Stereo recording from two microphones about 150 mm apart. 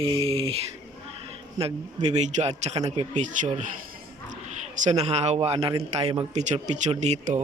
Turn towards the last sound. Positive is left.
turn(degrees=-50)  # may be behind; listen again after turning